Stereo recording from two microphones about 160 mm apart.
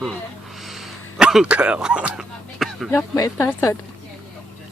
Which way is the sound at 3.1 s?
20° left (ahead or behind).